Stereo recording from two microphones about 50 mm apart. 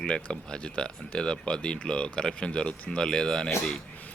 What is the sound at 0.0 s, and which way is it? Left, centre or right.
Speech, centre.